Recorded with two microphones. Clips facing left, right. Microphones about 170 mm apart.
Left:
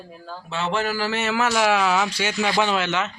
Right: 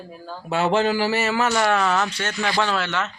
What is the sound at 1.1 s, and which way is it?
A man's voice, centre (ahead or behind).